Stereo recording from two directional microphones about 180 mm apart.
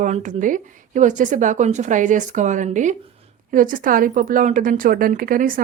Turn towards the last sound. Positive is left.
turn(degrees=-50)  # may be behind; listen again after turning